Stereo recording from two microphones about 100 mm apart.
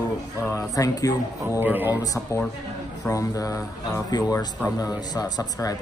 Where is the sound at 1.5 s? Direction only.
20° right (ahead or behind).